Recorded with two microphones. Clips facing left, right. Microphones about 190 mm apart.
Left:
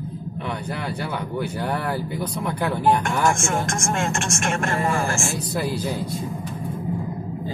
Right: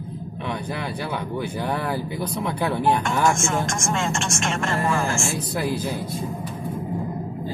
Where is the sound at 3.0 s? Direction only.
50° left (ahead or behind).